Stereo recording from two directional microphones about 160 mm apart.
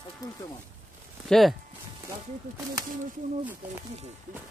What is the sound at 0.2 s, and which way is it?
Speech, 20° left (ahead or behind).